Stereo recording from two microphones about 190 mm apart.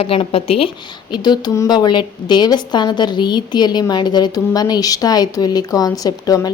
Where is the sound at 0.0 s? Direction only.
30° left (ahead or behind).